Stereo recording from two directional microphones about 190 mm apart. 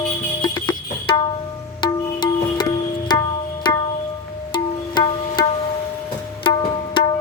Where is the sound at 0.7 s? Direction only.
25° left (ahead or behind).